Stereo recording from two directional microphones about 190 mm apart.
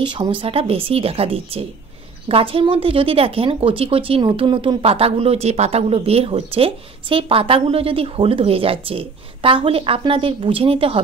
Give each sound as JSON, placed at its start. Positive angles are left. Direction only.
{"t": 0.0, "sound": "a woman's voice", "side_deg": -25}